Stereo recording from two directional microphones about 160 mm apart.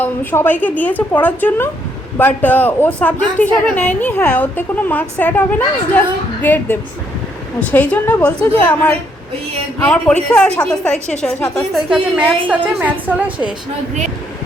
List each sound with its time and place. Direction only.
0.0 s a woman's voice: 10° left (ahead or behind)
11.3 s a woman's voice: 20° left (ahead or behind)
11.7 s a woman's voice: 5° right (ahead or behind)